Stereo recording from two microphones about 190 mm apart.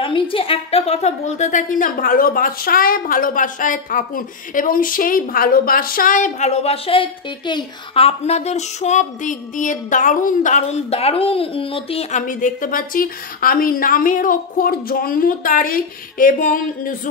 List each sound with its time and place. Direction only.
0.0 s a woman's voice: 25° left (ahead or behind); by 17.1 s 45° left (ahead or behind)